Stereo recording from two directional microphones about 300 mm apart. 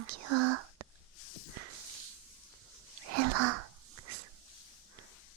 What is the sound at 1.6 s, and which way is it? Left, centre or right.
Whip, right.